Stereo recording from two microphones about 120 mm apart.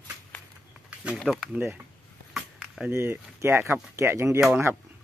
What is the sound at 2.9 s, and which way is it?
Speech, 20° right (ahead or behind).